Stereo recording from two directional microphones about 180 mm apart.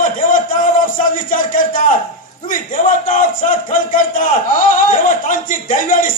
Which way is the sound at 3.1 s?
50° left (ahead or behind).